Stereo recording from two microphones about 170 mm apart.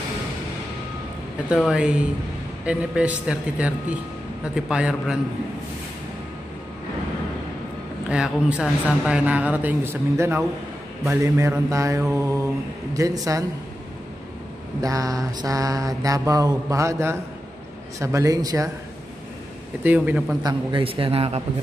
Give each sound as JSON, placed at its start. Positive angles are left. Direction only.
{"t": 1.5, "sound": "a man's voice", "side_deg": -5}
{"t": 8.1, "sound": "a man's voice", "side_deg": -5}
{"t": 12.9, "sound": "mantra", "side_deg": -20}
{"t": 14.8, "sound": "mantra", "side_deg": -20}
{"t": 19.8, "sound": "a man's voice", "side_deg": -10}
{"t": 20.4, "sound": "a man's voice", "side_deg": -30}